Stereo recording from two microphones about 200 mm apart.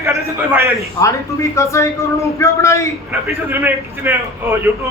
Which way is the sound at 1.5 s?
15° left (ahead or behind).